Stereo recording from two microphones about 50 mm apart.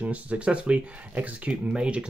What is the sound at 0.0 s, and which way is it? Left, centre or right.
Speech, right.